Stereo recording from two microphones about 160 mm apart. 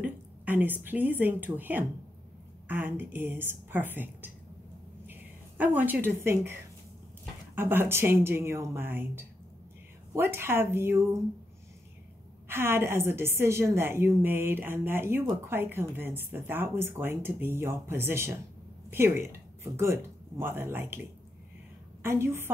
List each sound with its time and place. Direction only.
0.0 s a sound: 10° right (ahead or behind)
1.2 s a woman's voice: 10° right (ahead or behind)
7.5 s a woman's voice: 15° right (ahead or behind)
12.4 s a woman's voice: 15° right (ahead or behind)